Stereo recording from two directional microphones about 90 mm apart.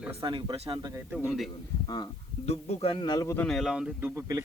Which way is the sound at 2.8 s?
90° left.